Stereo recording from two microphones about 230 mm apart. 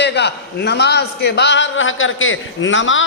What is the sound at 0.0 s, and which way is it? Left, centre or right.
A man's voice, left.